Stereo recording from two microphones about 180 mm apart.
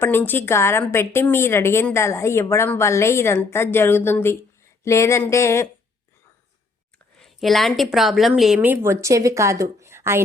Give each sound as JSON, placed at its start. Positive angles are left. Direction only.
{"t": 0.0, "sound": "a woman's voice", "side_deg": 10}
{"t": 7.2, "sound": "a woman's voice", "side_deg": 0}